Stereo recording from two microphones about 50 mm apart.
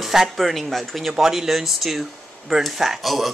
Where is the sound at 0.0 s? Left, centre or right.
Centre.